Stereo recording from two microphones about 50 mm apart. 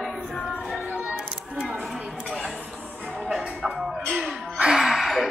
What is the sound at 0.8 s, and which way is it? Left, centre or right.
Music, right.